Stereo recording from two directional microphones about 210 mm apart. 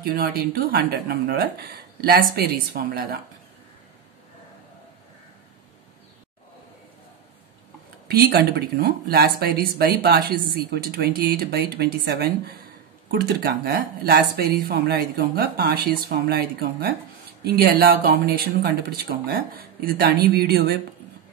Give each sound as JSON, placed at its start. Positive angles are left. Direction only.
{"t": 0.0, "sound": "speech", "side_deg": -45}
{"t": 8.1, "sound": "speech", "side_deg": -50}